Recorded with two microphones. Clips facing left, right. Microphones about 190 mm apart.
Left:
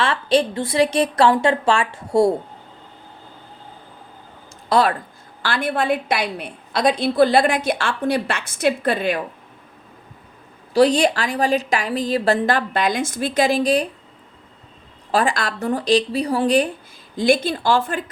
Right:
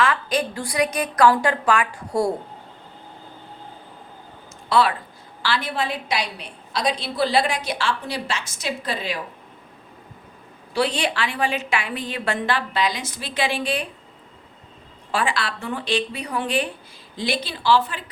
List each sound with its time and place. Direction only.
0.0 s a woman's voice: 30° left (ahead or behind)
4.7 s a woman's voice: 45° left (ahead or behind)
10.8 s a woman's voice: 40° left (ahead or behind)
15.1 s a woman's voice: 40° left (ahead or behind)